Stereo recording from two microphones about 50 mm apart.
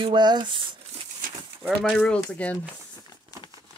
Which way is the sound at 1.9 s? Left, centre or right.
Centre.